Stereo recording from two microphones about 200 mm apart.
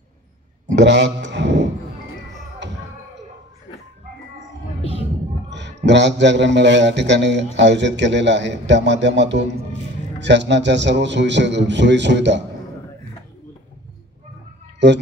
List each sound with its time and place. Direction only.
0.7 s a sound: 60° right (ahead or behind)
5.5 s a man's voice: 60° right (ahead or behind)
14.8 s a man's voice: 60° right (ahead or behind)